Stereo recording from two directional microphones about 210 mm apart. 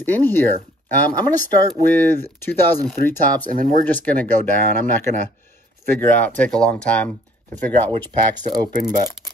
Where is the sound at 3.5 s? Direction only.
40° right (ahead or behind).